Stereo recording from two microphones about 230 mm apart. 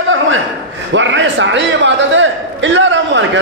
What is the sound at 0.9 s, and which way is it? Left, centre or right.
A man's voice, right.